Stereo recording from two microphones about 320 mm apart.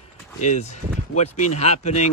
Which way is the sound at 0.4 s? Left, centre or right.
Left.